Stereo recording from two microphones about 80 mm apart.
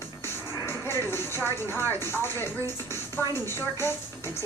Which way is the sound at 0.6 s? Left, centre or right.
Left.